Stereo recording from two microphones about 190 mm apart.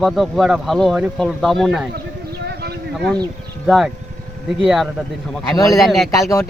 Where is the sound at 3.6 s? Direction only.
Centre (ahead or behind).